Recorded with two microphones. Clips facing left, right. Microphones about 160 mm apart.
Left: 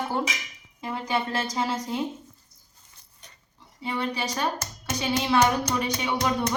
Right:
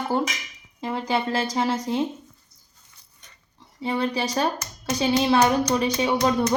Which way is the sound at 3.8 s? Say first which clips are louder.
Right 4 dB; 35° right (ahead or behind).